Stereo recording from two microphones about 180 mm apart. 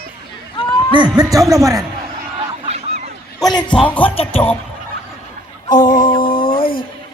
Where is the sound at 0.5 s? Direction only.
25° left (ahead or behind).